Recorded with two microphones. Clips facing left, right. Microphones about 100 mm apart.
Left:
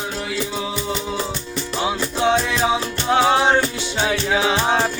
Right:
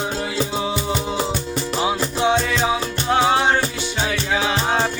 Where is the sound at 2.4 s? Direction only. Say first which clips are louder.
Left 1 dB; 5° left (ahead or behind).